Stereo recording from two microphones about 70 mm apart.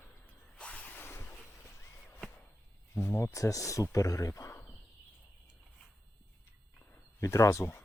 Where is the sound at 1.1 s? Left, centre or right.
Left.